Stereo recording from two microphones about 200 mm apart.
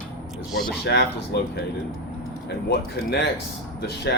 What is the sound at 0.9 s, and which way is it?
Speech, 60° left (ahead or behind).